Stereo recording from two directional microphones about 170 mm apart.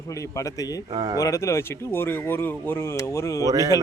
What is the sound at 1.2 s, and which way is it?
Speech, 20° left (ahead or behind).